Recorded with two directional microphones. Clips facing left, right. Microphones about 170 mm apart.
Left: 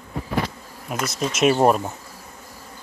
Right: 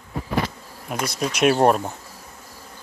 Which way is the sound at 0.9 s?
Centre (ahead or behind).